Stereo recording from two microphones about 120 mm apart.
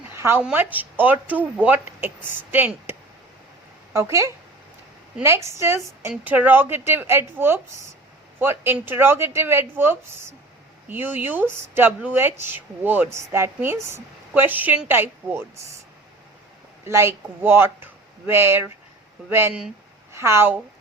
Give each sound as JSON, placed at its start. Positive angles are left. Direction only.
{"t": 0.1, "sound": "a sound", "side_deg": -20}
{"t": 0.5, "sound": "speech", "side_deg": -15}
{"t": 3.9, "sound": "a woman's voice", "side_deg": -25}
{"t": 16.8, "sound": "a woman's voice", "side_deg": -20}